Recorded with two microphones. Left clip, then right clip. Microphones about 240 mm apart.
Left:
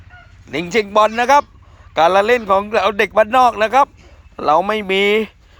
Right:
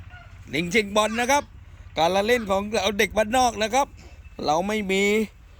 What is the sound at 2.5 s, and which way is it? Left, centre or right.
Speech, left.